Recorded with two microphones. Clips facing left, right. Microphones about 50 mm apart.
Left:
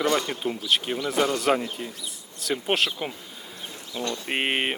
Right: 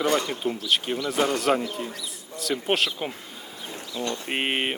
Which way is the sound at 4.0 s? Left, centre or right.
Left.